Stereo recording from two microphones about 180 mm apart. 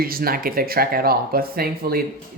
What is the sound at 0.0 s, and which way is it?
Speech, 55° right (ahead or behind).